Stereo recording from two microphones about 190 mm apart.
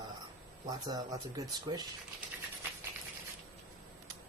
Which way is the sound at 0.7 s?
20° right (ahead or behind).